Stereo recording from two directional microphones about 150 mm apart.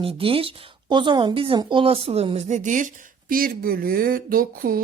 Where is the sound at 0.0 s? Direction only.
40° right (ahead or behind).